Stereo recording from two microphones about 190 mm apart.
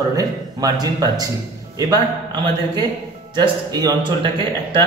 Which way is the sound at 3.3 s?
20° right (ahead or behind).